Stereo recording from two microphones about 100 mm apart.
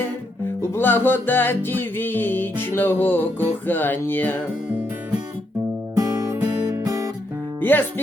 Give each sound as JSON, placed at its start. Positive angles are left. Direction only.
{"t": 0.0, "sound": "music", "side_deg": 25}
{"t": 6.0, "sound": "music", "side_deg": -30}
{"t": 7.6, "sound": "music", "side_deg": 20}